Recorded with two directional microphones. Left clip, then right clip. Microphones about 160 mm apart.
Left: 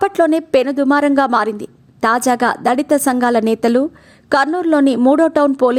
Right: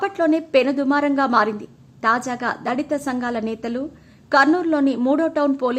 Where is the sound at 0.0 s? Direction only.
50° left (ahead or behind).